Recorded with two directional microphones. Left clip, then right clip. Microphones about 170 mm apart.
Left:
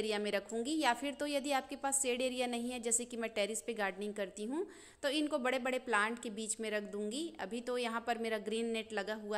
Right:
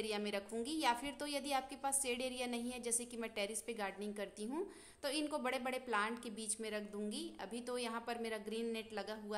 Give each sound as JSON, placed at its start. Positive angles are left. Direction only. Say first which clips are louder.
{"t": 0.0, "sound": "a woman's voice", "louder": "left 5 dB", "side_deg": 20}